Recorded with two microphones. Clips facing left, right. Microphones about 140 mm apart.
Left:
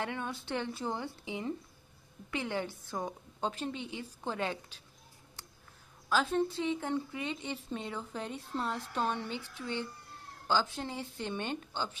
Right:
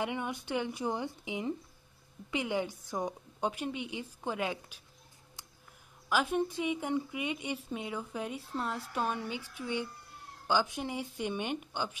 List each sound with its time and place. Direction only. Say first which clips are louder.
0.0 s a woman's voice: right 2 dB; 15° right (ahead or behind)
6.0 s a woman's voice: even; 15° right (ahead or behind)